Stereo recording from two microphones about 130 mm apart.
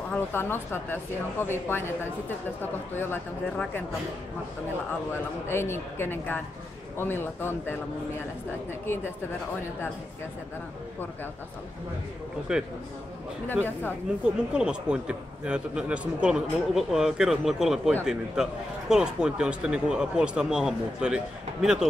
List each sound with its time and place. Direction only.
0.1 s speech: 15° left (ahead or behind)
5.1 s speech: 20° left (ahead or behind)
8.8 s speech: 20° left (ahead or behind)
12.5 s speech: 5° right (ahead or behind)
14.2 s speech: 5° right (ahead or behind)